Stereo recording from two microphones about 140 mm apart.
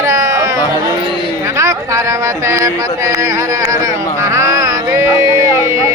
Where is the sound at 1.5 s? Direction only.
20° right (ahead or behind).